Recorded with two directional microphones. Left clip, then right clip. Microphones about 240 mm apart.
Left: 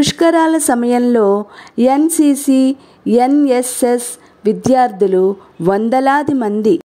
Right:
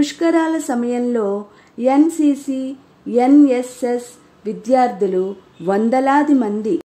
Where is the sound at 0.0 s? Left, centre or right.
Left.